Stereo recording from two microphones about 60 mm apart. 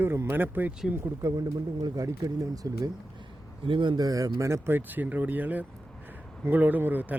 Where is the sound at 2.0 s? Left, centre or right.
Right.